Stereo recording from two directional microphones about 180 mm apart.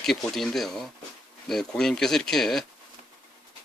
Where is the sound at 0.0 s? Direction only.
Centre (ahead or behind).